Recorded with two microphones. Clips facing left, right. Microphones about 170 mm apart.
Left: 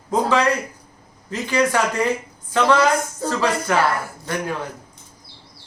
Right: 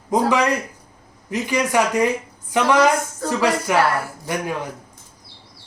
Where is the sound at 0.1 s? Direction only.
15° right (ahead or behind).